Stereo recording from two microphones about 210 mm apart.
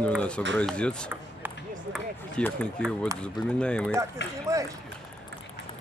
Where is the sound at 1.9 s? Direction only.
5° left (ahead or behind).